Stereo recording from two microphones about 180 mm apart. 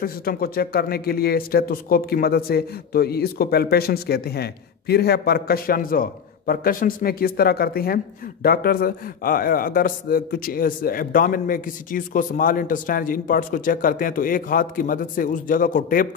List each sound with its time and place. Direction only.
0.0 s speech: 55° left (ahead or behind)